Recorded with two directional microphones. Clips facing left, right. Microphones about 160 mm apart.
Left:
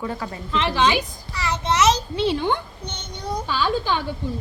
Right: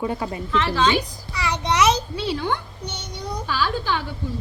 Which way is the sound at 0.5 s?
15° left (ahead or behind).